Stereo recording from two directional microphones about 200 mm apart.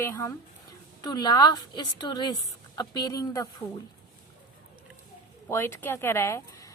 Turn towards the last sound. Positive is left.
turn(degrees=15)  # may be behind; listen again after turning